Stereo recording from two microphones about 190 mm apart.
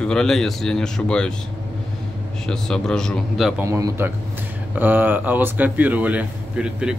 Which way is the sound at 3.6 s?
15° right (ahead or behind).